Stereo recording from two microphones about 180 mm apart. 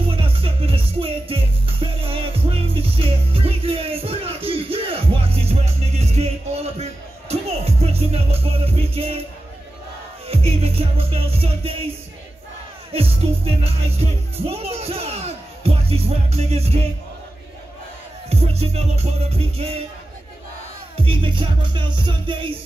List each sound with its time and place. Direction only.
0.1 s music: 30° right (ahead or behind)
10.2 s music: 35° right (ahead or behind)
12.9 s music: 35° right (ahead or behind)
18.3 s music: 35° right (ahead or behind)
20.9 s music: 30° right (ahead or behind)